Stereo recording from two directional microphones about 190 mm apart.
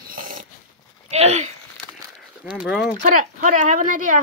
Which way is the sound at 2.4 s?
5° right (ahead or behind).